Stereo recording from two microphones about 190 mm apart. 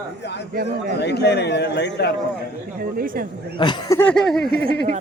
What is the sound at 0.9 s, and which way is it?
A man's voice, 60° left (ahead or behind).